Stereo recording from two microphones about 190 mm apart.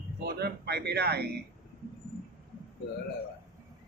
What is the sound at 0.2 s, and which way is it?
Speech, 60° right (ahead or behind).